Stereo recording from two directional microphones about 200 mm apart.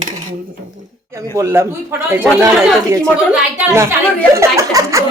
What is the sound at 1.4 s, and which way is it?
Speech, 15° right (ahead or behind).